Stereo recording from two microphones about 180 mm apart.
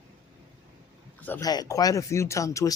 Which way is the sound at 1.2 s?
10° left (ahead or behind).